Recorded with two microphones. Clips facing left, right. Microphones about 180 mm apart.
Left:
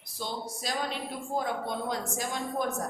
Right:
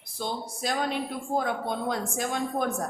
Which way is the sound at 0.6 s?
55° right (ahead or behind).